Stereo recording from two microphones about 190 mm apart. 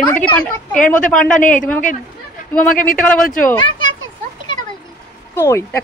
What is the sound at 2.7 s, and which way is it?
Speech, 45° left (ahead or behind).